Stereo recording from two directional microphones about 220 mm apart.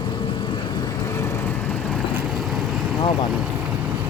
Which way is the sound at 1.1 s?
10° left (ahead or behind).